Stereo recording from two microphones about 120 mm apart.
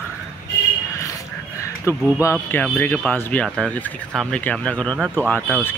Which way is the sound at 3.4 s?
Centre (ahead or behind).